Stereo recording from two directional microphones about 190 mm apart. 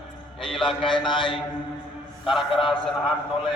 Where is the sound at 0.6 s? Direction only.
25° left (ahead or behind).